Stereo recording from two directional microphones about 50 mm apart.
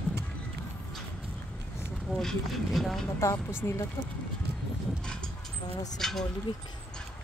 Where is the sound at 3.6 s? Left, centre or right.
Left.